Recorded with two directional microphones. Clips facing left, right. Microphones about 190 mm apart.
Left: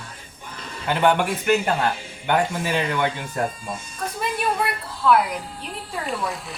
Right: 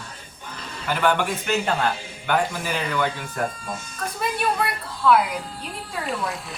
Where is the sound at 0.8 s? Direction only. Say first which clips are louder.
Left 3 dB; 20° left (ahead or behind).